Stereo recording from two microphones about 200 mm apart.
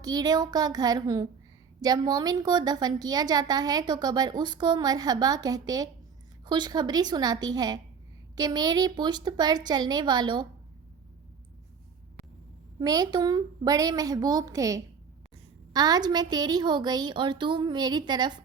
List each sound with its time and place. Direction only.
0.0 s a woman's voice: 20° right (ahead or behind)
12.8 s a woman's voice: 20° right (ahead or behind)